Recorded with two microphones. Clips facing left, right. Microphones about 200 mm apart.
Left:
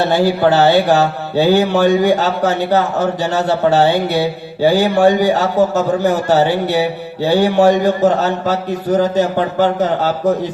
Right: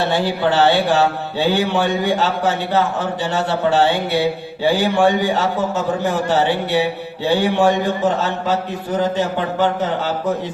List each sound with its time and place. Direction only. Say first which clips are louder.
0.1 s a man's voice: left 5 dB; 40° left (ahead or behind)